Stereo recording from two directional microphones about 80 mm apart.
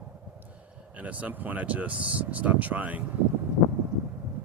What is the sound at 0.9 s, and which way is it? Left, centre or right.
Speech, centre.